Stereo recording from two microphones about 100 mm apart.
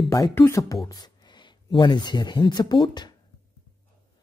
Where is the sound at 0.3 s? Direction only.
25° left (ahead or behind).